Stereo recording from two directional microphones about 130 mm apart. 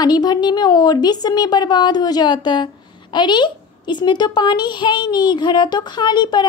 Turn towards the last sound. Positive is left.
turn(degrees=35)  # may be behind; listen again after turning